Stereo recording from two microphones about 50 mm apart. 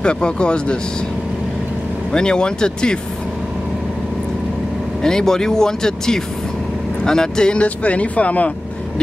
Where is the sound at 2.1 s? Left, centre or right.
Centre.